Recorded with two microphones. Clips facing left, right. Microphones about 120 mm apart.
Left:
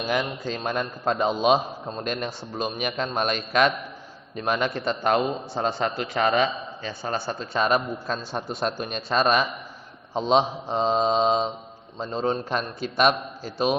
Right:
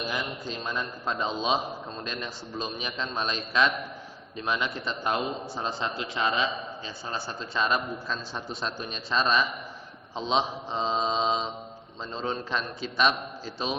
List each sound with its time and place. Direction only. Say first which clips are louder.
0.6 s a man's voice: left 6 dB; 55° left (ahead or behind)